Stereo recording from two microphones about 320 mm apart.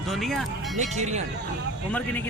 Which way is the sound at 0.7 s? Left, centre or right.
Right.